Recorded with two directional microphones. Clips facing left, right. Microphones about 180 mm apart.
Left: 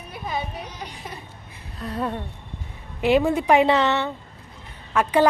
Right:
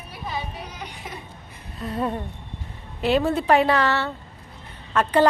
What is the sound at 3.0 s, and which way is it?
A woman's voice, 15° left (ahead or behind).